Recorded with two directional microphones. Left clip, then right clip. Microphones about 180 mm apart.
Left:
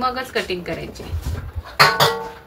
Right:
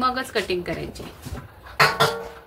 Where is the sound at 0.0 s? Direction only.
40° right (ahead or behind).